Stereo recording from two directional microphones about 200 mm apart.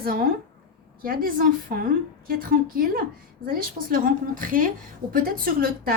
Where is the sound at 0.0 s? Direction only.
45° right (ahead or behind).